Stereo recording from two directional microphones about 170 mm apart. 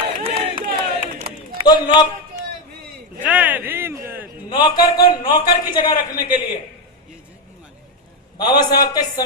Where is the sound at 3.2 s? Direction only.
10° right (ahead or behind).